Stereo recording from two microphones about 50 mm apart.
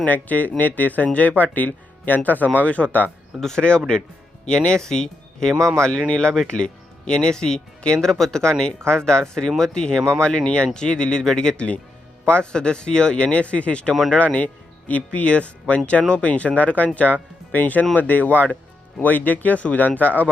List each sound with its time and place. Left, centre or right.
0.0 s speech: left
3.6 s speech: centre
5.5 s speech: right
6.1 s speech: centre; by 20.3 s left